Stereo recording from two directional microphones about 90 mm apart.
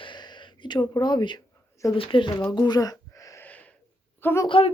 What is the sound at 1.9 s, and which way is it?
Speech, 80° left.